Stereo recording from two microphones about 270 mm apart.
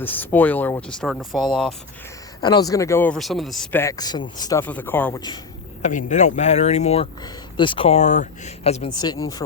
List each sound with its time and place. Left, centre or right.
0.0 s speech: centre
2.4 s speech: centre
5.8 s speech: left